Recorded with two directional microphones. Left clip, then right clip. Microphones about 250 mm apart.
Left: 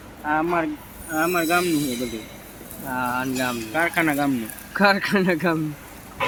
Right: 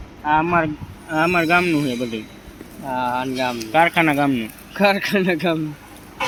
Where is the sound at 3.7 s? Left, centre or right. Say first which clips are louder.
Right 6 dB; right.